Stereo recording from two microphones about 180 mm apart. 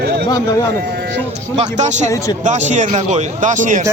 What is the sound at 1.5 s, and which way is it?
Speech, 40° right (ahead or behind).